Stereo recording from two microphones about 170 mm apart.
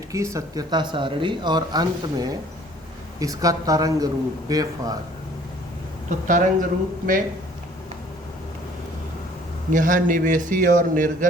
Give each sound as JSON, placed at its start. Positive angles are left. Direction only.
{"t": 0.1, "sound": "speech", "side_deg": -20}
{"t": 6.1, "sound": "a man's voice", "side_deg": -50}
{"t": 9.7, "sound": "a man's voice", "side_deg": -50}